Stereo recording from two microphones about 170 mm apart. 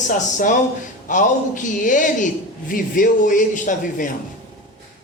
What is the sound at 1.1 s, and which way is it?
A man's voice, 50° left (ahead or behind).